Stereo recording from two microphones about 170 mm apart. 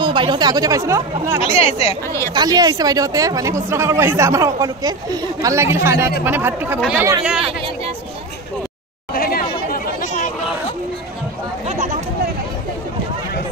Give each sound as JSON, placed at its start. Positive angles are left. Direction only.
{"t": 0.0, "sound": "speech", "side_deg": -25}
{"t": 1.4, "sound": "speech", "side_deg": 40}
{"t": 2.3, "sound": "speech", "side_deg": -25}
{"t": 9.1, "sound": "chatter", "side_deg": 60}
{"t": 11.6, "sound": "a sound", "side_deg": -40}